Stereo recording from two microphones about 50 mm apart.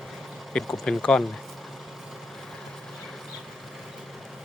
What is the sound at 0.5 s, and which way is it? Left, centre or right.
Speech, centre.